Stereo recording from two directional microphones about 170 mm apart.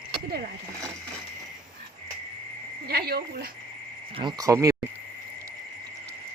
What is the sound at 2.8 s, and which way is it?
Speech, 65° right (ahead or behind).